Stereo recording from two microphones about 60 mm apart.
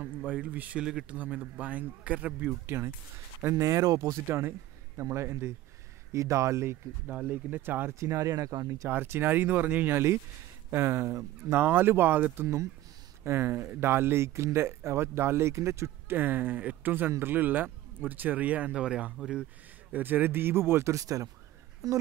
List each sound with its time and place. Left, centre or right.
0.2 s speech: right
0.8 s speech: centre
1.1 s speech: right
2.6 s speech: right
3.5 s speech: right
4.3 s a sound: right
5.0 s speech: right
7.1 s speech: right
7.9 s speech: right
8.8 s speech: right
12.4 s speech: right
16.2 s speech: right; by 19.4 s centre
19.9 s speech: right
20.9 s speech: right